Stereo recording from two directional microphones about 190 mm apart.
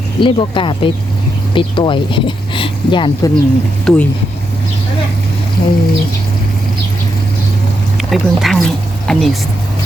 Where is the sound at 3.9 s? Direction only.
Centre (ahead or behind).